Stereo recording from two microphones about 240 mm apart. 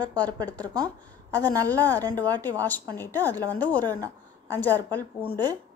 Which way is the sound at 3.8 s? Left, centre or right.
Centre.